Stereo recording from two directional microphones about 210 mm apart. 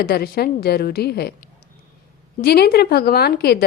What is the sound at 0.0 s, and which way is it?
A woman's voice, 45° left (ahead or behind).